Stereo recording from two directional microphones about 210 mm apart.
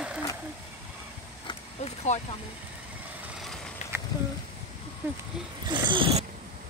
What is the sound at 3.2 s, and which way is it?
Vehicle, centre (ahead or behind).